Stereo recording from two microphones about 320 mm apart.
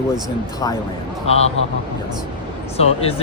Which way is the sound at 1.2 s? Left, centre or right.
Centre.